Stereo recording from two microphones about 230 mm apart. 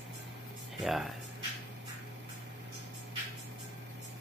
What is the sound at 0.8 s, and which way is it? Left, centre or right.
Speech, centre.